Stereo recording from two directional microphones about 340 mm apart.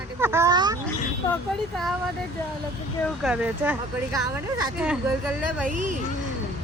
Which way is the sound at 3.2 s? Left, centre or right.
Centre.